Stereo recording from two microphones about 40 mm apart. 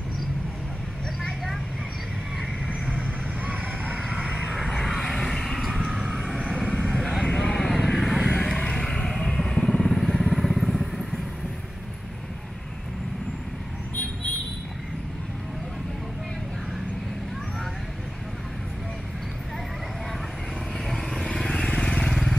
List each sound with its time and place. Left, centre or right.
2.8 s vehicle: right
3.6 s vehicle: right
4.1 s vehicle: right
4.8 s vehicle: centre
5.2 s a sound: centre
5.9 s vehicle: centre
7.0 s vehicle: centre
8.4 s vehicle: centre
9.7 s vehicle: centre
20.9 s vehicle: centre